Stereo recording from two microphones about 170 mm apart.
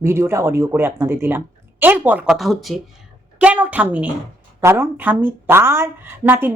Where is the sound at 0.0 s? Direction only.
15° right (ahead or behind).